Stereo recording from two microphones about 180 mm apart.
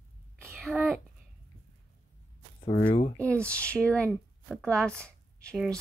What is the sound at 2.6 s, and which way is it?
Speech, 30° left (ahead or behind).